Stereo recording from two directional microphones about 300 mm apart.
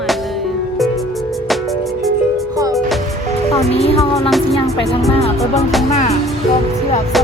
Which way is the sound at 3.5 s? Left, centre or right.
Centre.